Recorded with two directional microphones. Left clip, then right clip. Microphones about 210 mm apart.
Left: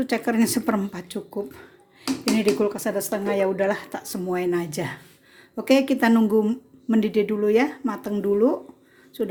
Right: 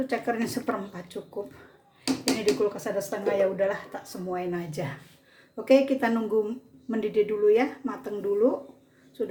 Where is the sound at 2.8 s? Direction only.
50° left (ahead or behind).